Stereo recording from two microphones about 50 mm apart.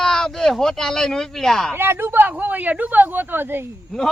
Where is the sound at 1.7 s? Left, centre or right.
Right.